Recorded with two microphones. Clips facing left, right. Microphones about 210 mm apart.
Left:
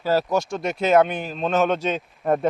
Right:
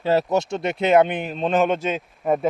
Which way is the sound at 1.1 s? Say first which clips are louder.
Right 2 dB; 20° right (ahead or behind).